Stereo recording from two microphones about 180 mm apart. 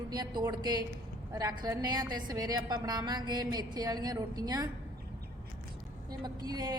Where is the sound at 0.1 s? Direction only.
20° right (ahead or behind).